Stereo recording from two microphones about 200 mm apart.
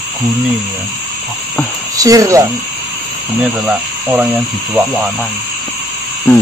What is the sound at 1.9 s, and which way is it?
Speech, 15° right (ahead or behind).